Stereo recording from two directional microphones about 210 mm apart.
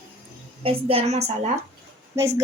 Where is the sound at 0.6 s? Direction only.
30° right (ahead or behind).